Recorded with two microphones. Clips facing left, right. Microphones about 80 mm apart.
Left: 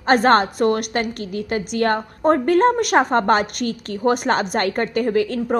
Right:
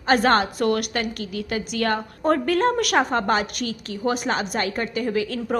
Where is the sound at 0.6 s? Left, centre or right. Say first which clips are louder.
Left 3 dB; left.